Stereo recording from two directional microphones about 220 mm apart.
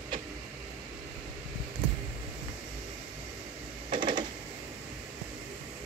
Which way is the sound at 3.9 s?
20° right (ahead or behind).